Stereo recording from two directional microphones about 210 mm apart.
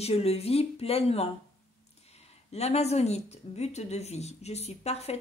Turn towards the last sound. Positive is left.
turn(degrees=30)  # may be behind; listen again after turning